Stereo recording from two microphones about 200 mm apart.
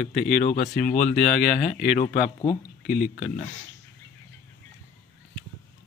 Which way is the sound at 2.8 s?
5° right (ahead or behind).